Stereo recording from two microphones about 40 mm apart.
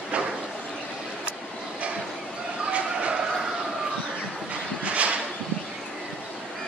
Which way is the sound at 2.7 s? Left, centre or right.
Right.